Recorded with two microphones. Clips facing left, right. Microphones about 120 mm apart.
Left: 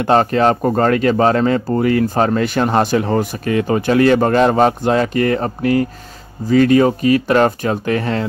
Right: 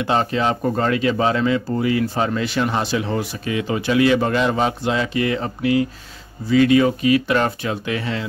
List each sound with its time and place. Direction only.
0.0 s speech: 50° left (ahead or behind)